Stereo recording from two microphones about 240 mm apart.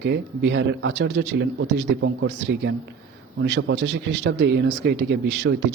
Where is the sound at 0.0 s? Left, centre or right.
Right.